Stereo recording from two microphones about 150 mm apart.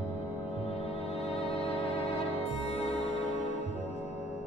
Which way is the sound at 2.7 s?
45° left (ahead or behind).